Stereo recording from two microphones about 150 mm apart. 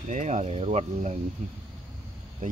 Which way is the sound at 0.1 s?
55° right (ahead or behind).